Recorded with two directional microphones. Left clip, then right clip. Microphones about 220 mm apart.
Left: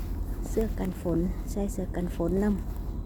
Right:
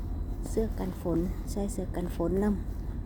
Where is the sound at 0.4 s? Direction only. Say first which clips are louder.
Left 2 dB; 5° left (ahead or behind).